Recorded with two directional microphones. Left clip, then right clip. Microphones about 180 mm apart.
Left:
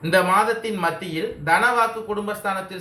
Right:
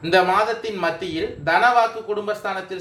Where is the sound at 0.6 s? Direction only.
40° right (ahead or behind).